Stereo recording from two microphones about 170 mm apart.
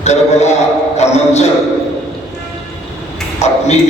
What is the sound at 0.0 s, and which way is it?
A man's voice, 40° left (ahead or behind).